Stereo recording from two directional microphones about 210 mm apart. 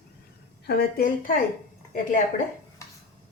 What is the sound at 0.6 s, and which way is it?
Speech, 45° left (ahead or behind).